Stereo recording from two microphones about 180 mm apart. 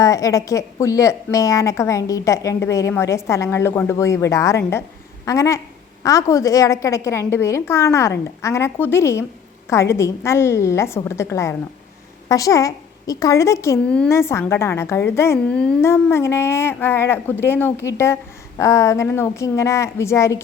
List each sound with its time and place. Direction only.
0.0 s a woman's voice: 20° left (ahead or behind)
13.8 s a woman's voice: 5° left (ahead or behind)